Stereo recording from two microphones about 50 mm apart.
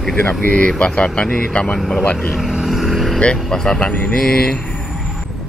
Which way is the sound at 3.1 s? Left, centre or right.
Centre.